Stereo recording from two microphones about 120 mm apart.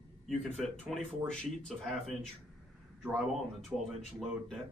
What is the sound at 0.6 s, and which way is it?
A man's voice, 5° left (ahead or behind).